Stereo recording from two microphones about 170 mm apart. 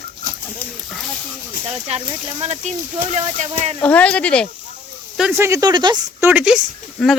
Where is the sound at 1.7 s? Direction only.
40° right (ahead or behind).